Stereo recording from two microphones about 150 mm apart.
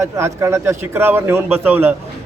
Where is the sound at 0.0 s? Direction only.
20° right (ahead or behind).